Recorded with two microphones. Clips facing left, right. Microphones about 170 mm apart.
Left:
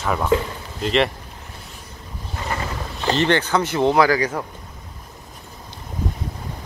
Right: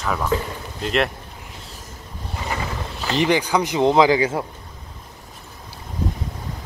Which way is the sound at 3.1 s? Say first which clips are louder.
Right 1 dB; 10° right (ahead or behind).